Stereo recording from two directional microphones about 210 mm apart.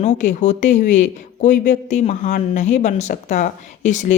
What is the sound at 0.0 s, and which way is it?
A woman's voice, 35° left (ahead or behind).